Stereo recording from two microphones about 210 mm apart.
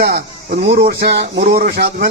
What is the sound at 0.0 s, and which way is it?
A man's voice, 50° right (ahead or behind).